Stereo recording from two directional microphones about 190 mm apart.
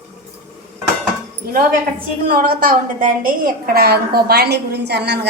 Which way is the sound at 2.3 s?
50° right (ahead or behind).